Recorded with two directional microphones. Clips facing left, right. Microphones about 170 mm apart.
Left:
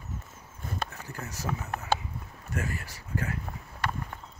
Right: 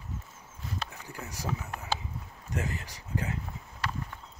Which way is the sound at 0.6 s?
50° left (ahead or behind).